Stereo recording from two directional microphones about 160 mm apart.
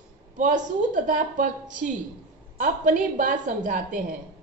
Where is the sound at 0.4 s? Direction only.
55° right (ahead or behind).